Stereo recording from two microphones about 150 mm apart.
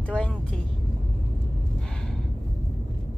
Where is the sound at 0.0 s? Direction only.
5° left (ahead or behind).